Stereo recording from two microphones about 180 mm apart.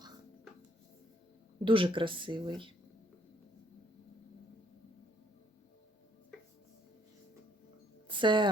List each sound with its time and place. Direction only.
1.6 s speech: 30° right (ahead or behind)
8.0 s music: 25° right (ahead or behind)